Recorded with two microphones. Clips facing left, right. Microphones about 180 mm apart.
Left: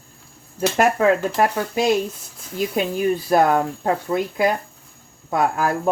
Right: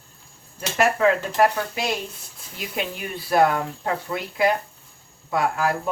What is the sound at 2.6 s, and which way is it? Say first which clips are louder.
Speech: left 8 dB; 40° left (ahead or behind).